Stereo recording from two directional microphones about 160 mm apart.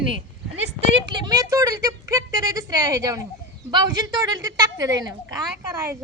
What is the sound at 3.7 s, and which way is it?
A woman's voice, 25° right (ahead or behind).